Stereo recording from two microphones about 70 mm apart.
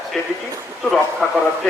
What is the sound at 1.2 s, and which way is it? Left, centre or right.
Speech, left.